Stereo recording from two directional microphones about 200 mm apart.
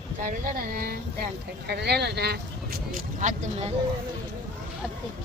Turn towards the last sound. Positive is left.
turn(degrees=-35)  # may be behind; listen again after turning